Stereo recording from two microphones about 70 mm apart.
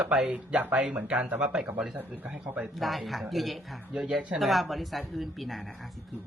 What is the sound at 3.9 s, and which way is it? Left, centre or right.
Speech, centre.